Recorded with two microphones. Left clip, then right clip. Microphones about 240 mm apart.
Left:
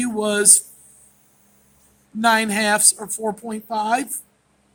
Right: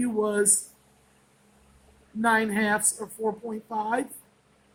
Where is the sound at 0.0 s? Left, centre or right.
Left.